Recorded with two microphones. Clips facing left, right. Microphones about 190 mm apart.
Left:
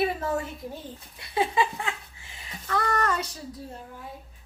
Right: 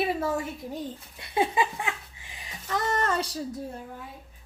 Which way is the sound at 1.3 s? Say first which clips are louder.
Even; 20° right (ahead or behind).